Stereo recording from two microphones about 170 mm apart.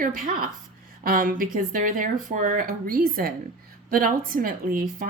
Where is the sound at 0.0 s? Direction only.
55° right (ahead or behind).